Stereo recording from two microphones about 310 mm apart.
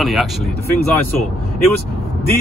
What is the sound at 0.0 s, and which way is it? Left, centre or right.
Speech, centre.